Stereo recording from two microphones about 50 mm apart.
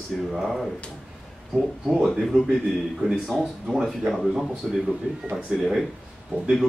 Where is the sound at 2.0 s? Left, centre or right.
Centre.